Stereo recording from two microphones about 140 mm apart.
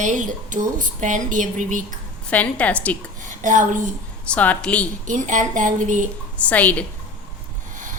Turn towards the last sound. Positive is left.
turn(degrees=10)  # may be behind; listen again after turning